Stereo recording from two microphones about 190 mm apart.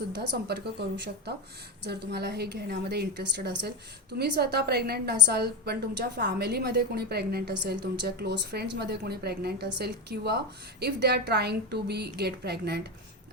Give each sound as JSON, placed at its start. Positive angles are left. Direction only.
{"t": 0.1, "sound": "a woman's voice", "side_deg": -60}